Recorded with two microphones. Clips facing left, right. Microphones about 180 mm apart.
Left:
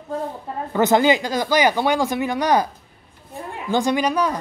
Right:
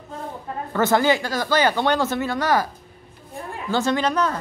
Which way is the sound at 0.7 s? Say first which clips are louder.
Left 2 dB; 15° left (ahead or behind).